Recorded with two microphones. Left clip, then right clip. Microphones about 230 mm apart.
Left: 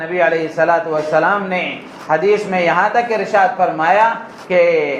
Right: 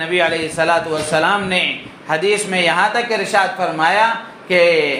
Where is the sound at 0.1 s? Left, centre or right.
Right.